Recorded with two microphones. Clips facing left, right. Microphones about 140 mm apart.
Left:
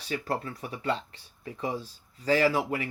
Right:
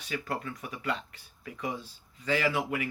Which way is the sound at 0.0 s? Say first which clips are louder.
Left 3 dB; 35° left (ahead or behind).